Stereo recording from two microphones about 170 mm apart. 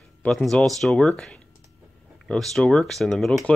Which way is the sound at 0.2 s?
5° left (ahead or behind).